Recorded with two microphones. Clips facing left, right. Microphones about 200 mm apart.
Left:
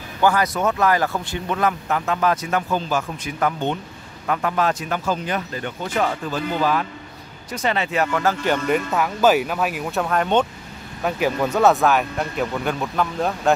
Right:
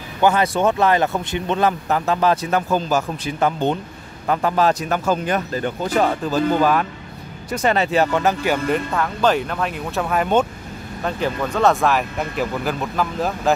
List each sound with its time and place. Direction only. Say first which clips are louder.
0.2 s speech: right 2 dB; 25° right (ahead or behind)
3.3 s speech: right 3 dB; 30° right (ahead or behind)
6.0 s speech: right 5 dB; 50° right (ahead or behind); by 8.4 s 20° right (ahead or behind)
8.6 s speech: even; 5° left (ahead or behind)
11.1 s speech: left 2 dB; 10° left (ahead or behind)